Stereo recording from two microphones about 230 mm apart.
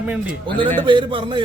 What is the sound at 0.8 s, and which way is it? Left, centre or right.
Speech, right.